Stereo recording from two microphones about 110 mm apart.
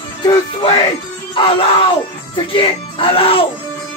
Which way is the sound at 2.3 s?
55° left (ahead or behind).